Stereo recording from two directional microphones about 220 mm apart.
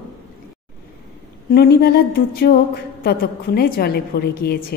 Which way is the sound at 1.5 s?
45° left (ahead or behind).